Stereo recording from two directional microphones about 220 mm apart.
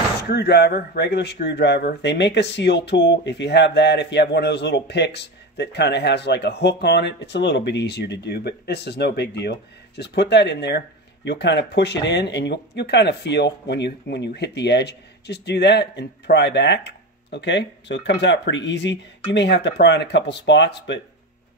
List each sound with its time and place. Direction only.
0.2 s speech: 50° left (ahead or behind)